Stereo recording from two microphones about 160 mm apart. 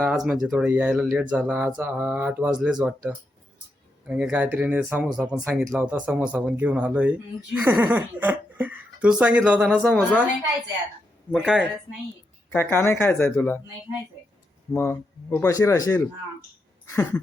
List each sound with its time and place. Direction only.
0.0 s speech: 5° right (ahead or behind)
9.8 s speech: 10° left (ahead or behind)
11.3 s speech: 5° right (ahead or behind)
12.5 s speech: 15° left (ahead or behind)
14.7 s speech: 15° left (ahead or behind)
16.8 s a sound: 15° left (ahead or behind)